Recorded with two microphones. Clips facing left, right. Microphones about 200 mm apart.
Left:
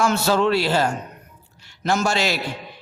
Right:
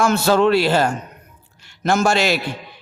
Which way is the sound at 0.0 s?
55° right (ahead or behind).